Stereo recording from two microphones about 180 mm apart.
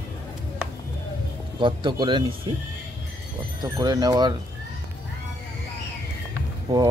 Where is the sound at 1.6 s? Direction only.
25° right (ahead or behind).